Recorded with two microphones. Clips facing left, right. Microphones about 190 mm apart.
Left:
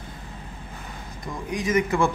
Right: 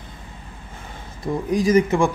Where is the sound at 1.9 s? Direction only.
15° right (ahead or behind).